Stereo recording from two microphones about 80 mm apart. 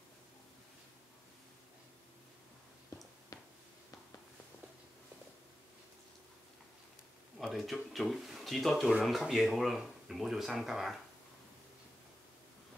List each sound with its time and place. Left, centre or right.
7.3 s speech: centre